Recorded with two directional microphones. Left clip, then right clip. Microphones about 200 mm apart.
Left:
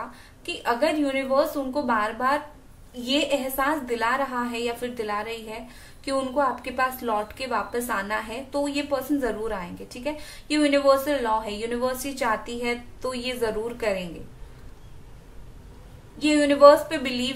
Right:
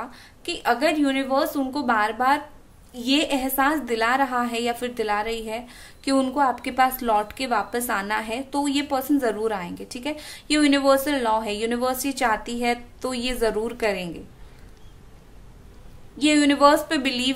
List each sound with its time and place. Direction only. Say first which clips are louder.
0.5 s a woman's voice: right 2 dB; 55° right (ahead or behind)
16.2 s a woman's voice: left 1 dB; 55° right (ahead or behind)